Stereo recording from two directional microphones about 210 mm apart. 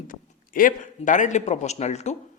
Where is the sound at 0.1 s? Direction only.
40° left (ahead or behind).